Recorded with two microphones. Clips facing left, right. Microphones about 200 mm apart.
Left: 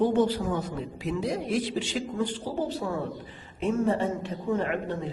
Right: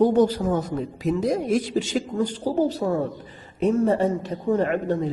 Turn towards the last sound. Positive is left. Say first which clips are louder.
# right 6 dB
turn(degrees=-40)  # may be behind; listen again after turning